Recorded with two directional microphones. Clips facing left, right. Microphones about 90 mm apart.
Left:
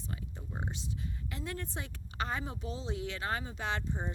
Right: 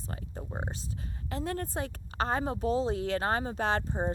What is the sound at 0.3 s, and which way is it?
A woman's voice, 35° right (ahead or behind).